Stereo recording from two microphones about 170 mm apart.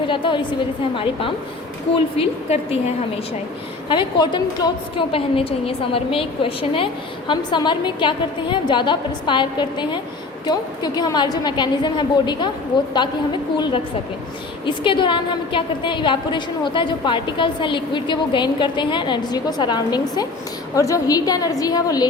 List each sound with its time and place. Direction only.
0.1 s a woman's voice: 30° left (ahead or behind)
2.1 s a woman's voice: 35° left (ahead or behind)
3.8 s a woman's voice: 30° left (ahead or behind)
14.6 s a woman's voice: 30° left (ahead or behind)